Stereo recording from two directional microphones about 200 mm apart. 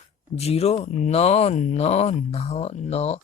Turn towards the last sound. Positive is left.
turn(degrees=30)  # may be behind; listen again after turning